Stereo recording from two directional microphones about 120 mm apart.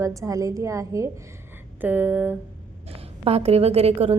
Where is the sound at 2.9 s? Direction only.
55° right (ahead or behind).